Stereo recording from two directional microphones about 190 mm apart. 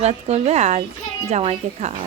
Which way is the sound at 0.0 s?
35° right (ahead or behind).